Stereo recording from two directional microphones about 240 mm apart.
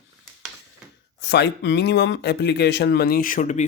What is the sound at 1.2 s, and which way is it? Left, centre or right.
Speech, left.